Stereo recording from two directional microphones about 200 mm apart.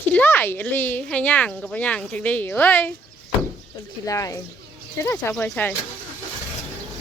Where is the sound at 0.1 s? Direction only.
10° left (ahead or behind).